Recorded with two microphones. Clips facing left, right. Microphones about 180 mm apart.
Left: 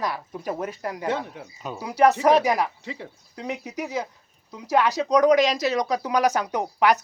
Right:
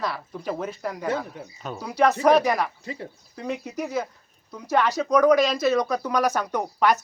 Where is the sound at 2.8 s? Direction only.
80° left.